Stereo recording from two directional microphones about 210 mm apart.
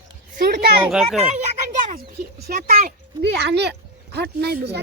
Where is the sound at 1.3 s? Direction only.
35° right (ahead or behind).